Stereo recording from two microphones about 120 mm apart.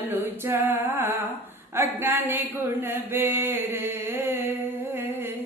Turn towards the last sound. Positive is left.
turn(degrees=-20)  # may be behind; listen again after turning